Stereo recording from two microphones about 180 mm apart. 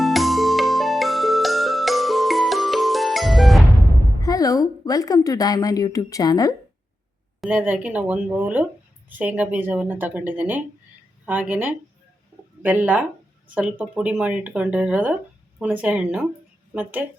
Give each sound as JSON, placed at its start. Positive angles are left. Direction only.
{"t": 0.0, "sound": "music", "side_deg": 0}
{"t": 4.2, "sound": "a woman's voice", "side_deg": 20}
{"t": 7.4, "sound": "speech", "side_deg": -10}